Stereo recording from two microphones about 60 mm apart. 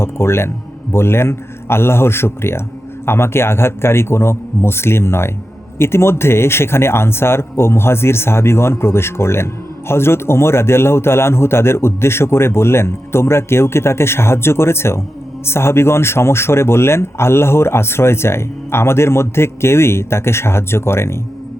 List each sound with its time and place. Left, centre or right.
0.0 s a man's voice: left